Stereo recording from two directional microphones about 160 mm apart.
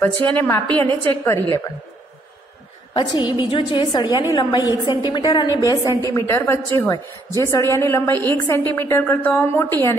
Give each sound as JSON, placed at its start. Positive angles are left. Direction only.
{"t": 0.0, "sound": "a woman's voice", "side_deg": 10}
{"t": 2.9, "sound": "a woman's voice", "side_deg": 30}